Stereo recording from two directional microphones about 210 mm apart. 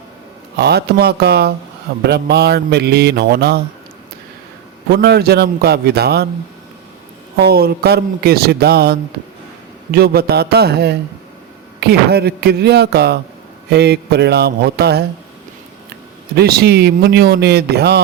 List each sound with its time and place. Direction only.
0.6 s a man's voice: 50° right (ahead or behind)
4.9 s a man's voice: 50° right (ahead or behind)
7.3 s a man's voice: 50° right (ahead or behind)
16.4 s a man's voice: 50° right (ahead or behind)